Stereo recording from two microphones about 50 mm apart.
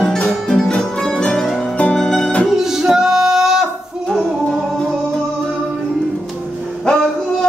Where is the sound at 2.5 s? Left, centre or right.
Centre.